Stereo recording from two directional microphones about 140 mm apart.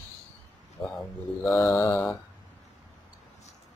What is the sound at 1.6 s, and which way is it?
Mantra, 20° left (ahead or behind).